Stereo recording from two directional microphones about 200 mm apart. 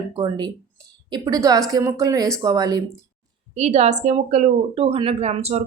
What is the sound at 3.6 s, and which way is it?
Speech, 35° right (ahead or behind).